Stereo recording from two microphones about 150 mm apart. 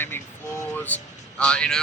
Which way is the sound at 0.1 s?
15° left (ahead or behind).